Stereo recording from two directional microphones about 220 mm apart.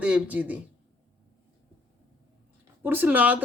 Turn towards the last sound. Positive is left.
turn(degrees=-5)  # may be behind; listen again after turning